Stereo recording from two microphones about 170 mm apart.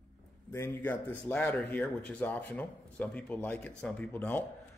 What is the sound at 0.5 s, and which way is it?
Speech, 15° left (ahead or behind).